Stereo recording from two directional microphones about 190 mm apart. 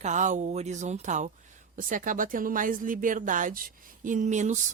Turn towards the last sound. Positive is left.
turn(degrees=-40)  # may be behind; listen again after turning